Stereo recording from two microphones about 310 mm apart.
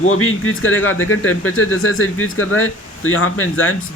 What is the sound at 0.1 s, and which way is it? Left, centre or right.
A man's voice, left.